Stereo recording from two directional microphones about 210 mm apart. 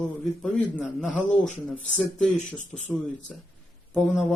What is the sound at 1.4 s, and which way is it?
Speech, 35° left (ahead or behind).